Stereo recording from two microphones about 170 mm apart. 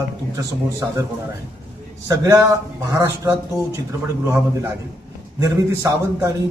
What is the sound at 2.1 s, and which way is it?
A man's voice, 20° right (ahead or behind).